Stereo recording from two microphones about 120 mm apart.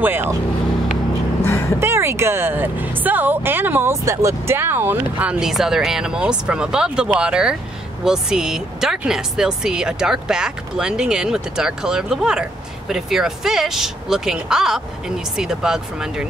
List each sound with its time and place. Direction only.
0.0 s speech: 20° right (ahead or behind)
1.4 s vehicle: 20° left (ahead or behind)
1.8 s speech: 20° right (ahead or behind)
5.2 s speech: 10° right (ahead or behind)